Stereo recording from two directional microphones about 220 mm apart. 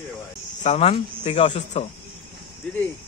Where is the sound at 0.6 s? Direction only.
30° left (ahead or behind).